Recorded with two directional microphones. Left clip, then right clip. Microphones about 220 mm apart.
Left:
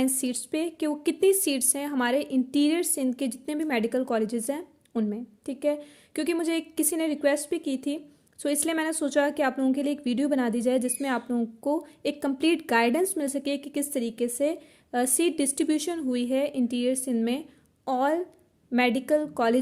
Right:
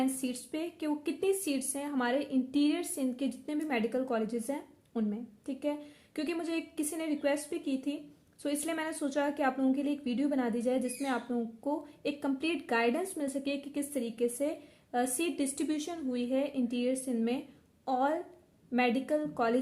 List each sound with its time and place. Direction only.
0.0 s a woman's voice: 45° left (ahead or behind)